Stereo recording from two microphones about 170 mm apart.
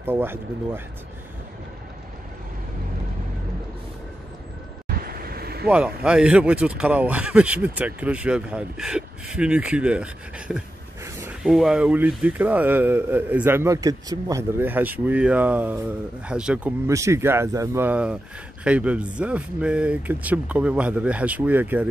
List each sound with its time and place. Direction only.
0.0 s speech: 15° right (ahead or behind)
4.8 s vehicle: 60° right (ahead or behind)
5.7 s speech: 5° right (ahead or behind)
11.1 s a sound: 15° right (ahead or behind)
11.4 s speech: 5° right (ahead or behind); by 14.4 s 20° right (ahead or behind)
14.6 s speech: 10° right (ahead or behind)